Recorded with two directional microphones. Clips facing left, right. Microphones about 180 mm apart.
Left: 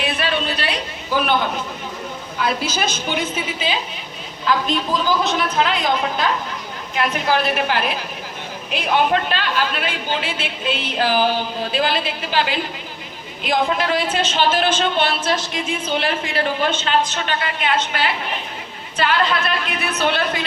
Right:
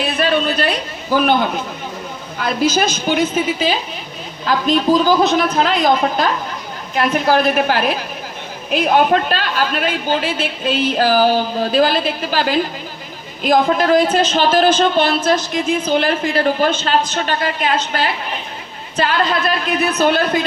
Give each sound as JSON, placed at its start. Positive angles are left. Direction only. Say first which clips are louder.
{"t": 0.0, "sound": "a man's voice", "louder": "right 5 dB", "side_deg": -45}
{"t": 2.4, "sound": "a woman's voice", "louder": "right 5 dB", "side_deg": -45}